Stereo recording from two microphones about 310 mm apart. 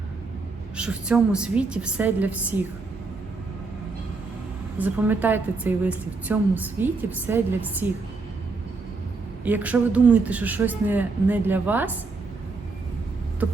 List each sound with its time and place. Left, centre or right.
0.8 s a woman's voice: centre
4.8 s a woman's voice: centre
9.4 s a woman's voice: centre